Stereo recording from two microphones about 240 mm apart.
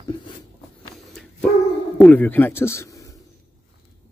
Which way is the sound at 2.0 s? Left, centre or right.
Centre.